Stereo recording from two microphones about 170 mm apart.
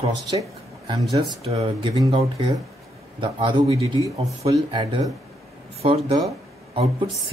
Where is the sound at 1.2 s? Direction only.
35° right (ahead or behind).